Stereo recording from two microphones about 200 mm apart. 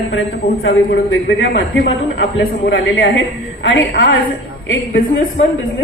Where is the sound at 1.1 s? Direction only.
75° left (ahead or behind).